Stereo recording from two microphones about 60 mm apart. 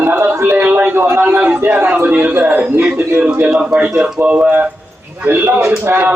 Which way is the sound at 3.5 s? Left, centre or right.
Centre.